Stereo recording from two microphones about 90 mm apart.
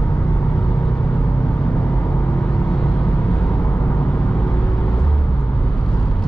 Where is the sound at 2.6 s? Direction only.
10° left (ahead or behind).